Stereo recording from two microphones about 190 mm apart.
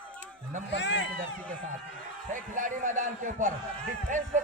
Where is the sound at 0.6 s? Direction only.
70° left (ahead or behind).